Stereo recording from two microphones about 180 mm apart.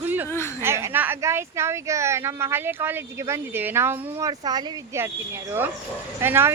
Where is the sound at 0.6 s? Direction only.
15° right (ahead or behind).